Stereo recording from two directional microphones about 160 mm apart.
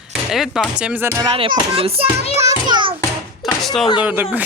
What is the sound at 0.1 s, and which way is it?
Speech, centre (ahead or behind).